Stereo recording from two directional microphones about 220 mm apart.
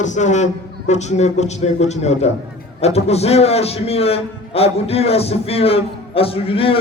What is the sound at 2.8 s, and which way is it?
A man's voice, 30° left (ahead or behind).